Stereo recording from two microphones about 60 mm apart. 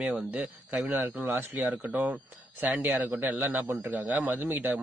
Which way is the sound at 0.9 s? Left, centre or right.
Right.